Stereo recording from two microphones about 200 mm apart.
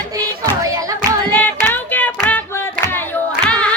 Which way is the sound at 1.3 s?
10° left (ahead or behind).